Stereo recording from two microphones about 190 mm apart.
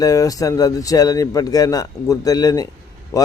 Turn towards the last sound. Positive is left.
turn(degrees=15)  # may be behind; listen again after turning